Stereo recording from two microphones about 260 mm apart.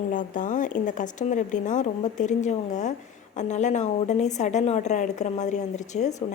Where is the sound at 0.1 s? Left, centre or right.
Left.